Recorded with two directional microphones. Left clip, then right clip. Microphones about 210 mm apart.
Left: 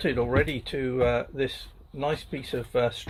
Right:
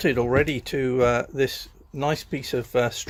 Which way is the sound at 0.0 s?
45° right (ahead or behind).